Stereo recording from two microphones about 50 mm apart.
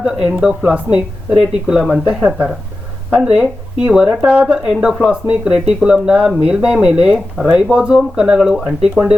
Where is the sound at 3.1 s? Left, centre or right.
Centre.